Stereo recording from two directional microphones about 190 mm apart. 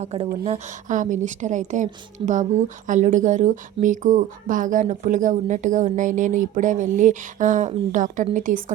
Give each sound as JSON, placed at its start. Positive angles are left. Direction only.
{"t": 0.0, "sound": "a woman's voice", "side_deg": -30}